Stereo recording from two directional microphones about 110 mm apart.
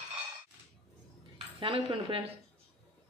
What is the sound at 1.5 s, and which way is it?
Speech, 55° right (ahead or behind).